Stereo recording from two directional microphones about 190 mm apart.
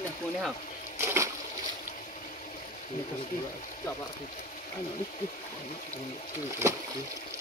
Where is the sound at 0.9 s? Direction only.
15° right (ahead or behind).